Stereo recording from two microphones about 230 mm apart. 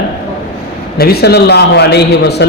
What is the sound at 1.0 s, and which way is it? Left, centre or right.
A man's voice, left.